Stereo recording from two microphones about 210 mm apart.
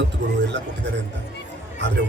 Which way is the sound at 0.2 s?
55° right (ahead or behind).